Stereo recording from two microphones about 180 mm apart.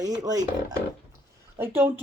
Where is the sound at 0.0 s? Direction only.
20° right (ahead or behind).